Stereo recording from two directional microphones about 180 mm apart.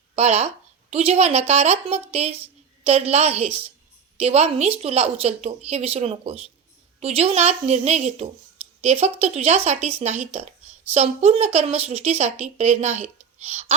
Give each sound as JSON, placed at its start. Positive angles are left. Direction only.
{"t": 0.2, "sound": "a woman's voice", "side_deg": -35}